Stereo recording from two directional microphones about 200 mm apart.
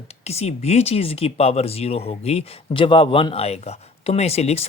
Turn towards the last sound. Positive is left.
turn(degrees=30)  # may be behind; listen again after turning